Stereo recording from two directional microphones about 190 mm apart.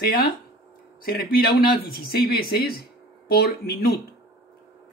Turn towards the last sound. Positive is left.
turn(degrees=55)  # may be behind; listen again after turning